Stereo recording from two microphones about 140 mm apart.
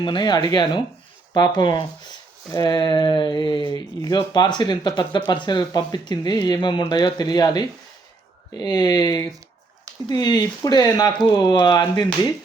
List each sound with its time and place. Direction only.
0.0 s speech: 35° left (ahead or behind)